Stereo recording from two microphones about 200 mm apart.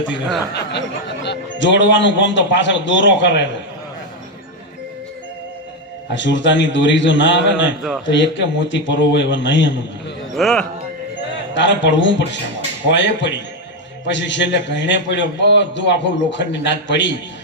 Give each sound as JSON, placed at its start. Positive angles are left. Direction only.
{"t": 1.2, "sound": "a man's voice", "side_deg": 60}
{"t": 6.1, "sound": "a man's voice", "side_deg": 65}
{"t": 7.8, "sound": "speech", "side_deg": 0}
{"t": 8.1, "sound": "a man's voice", "side_deg": 65}
{"t": 10.3, "sound": "speech", "side_deg": 0}
{"t": 11.5, "sound": "a man's voice", "side_deg": 65}